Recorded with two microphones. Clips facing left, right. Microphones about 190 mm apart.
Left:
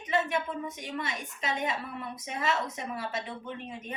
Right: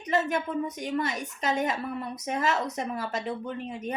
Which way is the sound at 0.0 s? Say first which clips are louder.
Right 3 dB; 40° right (ahead or behind).